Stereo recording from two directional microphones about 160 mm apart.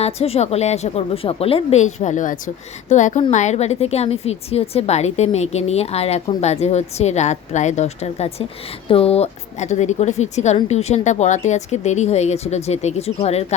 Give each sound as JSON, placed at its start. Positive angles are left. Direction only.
{"t": 0.0, "sound": "a woman's voice", "side_deg": 40}